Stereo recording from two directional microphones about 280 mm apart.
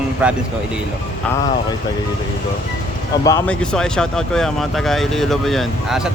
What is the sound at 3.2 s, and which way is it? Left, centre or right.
Speech, centre.